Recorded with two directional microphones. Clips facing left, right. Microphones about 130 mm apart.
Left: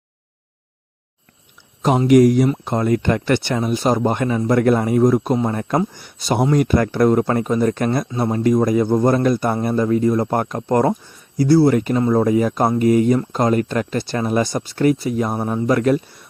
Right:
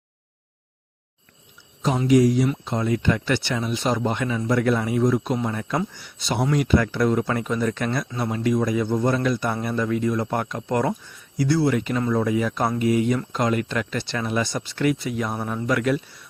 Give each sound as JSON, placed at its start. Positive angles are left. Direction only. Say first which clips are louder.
{"t": 2.0, "sound": "speech", "louder": "left 5 dB", "side_deg": 55}